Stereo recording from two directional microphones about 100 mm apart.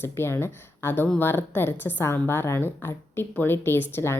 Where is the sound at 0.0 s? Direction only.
25° left (ahead or behind).